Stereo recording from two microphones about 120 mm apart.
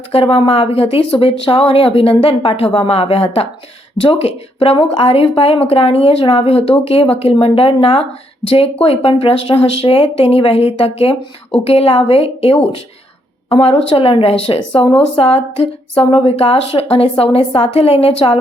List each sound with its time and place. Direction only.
0.1 s speech: 50° left (ahead or behind)